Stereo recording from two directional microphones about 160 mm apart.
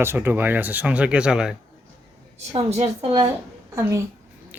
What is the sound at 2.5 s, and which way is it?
Speech, 40° right (ahead or behind).